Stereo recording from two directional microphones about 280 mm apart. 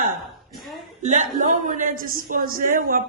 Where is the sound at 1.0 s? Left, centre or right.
Right.